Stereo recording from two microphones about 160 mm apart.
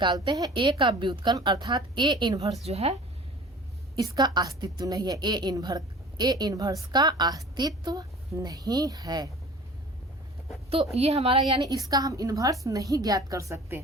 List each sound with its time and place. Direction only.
0.0 s a woman's voice: 30° right (ahead or behind)
2.6 s speech: 40° right (ahead or behind)
3.9 s a woman's voice: 25° right (ahead or behind)
10.9 s a woman's voice: 40° right (ahead or behind); by 13.8 s 15° right (ahead or behind)